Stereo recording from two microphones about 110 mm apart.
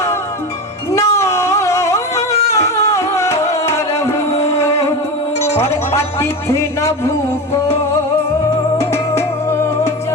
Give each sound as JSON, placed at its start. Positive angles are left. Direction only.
{"t": 0.9, "sound": "a sound", "side_deg": 25}
{"t": 2.3, "sound": "music", "side_deg": 75}
{"t": 2.6, "sound": "music", "side_deg": 25}
{"t": 5.5, "sound": "speech", "side_deg": 25}
{"t": 8.8, "sound": "music", "side_deg": 25}